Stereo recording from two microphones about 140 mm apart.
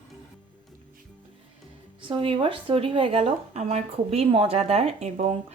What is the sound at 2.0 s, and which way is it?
Speech, 40° right (ahead or behind).